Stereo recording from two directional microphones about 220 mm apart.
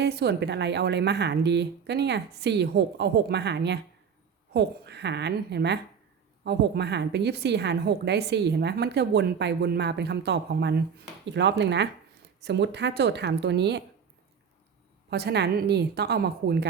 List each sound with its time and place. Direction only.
0.0 s a woman's voice: 50° right (ahead or behind)
15.1 s a woman's voice: 50° right (ahead or behind)